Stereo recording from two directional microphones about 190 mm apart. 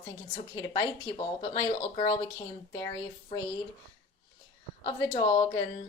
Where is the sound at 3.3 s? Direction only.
30° left (ahead or behind).